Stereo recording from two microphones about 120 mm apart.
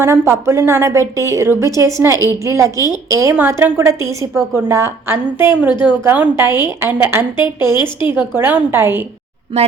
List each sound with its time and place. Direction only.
0.0 s a woman's voice: 20° right (ahead or behind)